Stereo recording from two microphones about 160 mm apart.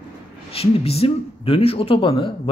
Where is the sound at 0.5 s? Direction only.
40° left (ahead or behind).